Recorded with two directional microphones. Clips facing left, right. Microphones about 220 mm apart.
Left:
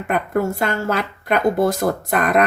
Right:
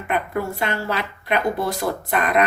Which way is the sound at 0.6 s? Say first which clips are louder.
Left 4 dB; 45° left (ahead or behind).